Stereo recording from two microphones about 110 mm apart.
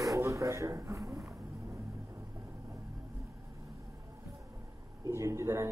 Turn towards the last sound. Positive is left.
turn(degrees=-25)  # may be behind; listen again after turning